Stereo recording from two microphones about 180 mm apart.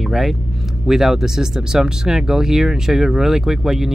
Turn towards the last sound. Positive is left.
turn(degrees=0)  # may be behind; listen again after turning